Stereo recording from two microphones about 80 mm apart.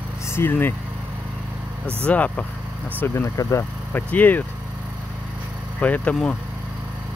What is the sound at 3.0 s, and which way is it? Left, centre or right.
Speech, left.